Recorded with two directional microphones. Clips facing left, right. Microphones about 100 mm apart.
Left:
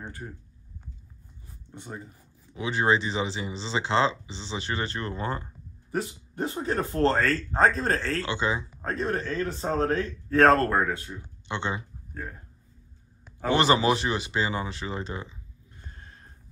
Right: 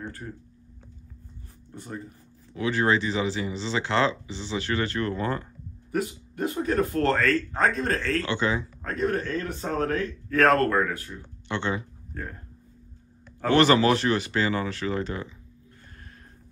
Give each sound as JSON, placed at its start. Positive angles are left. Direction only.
{"t": 0.0, "sound": "speech", "side_deg": 15}
{"t": 1.7, "sound": "speech", "side_deg": 15}
{"t": 13.4, "sound": "speech", "side_deg": 20}